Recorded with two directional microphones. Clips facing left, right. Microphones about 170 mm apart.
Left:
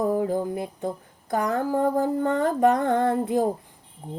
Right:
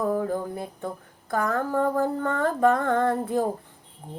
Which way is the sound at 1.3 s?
15° left (ahead or behind).